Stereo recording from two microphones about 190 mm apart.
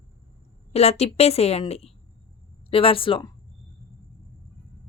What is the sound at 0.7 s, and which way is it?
A woman's voice, 35° left (ahead or behind).